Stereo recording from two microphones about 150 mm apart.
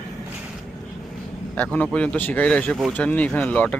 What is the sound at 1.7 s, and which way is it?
Speech, 10° left (ahead or behind).